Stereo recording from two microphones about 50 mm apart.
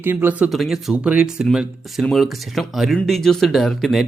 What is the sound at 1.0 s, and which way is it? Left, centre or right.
Speech, right.